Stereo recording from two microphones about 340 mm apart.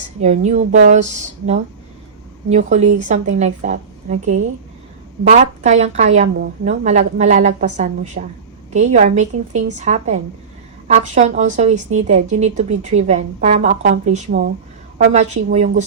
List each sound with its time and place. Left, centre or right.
0.2 s speech: centre